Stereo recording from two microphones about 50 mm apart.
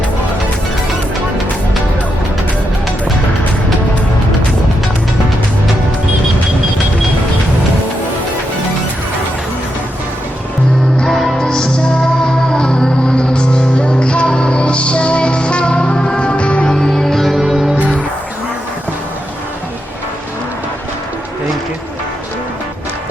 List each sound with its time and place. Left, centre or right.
11.0 s music: centre
11.3 s music: centre
16.7 s music: centre
17.4 s music: centre